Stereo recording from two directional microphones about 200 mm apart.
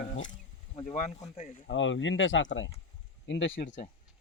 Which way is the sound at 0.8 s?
35° left (ahead or behind).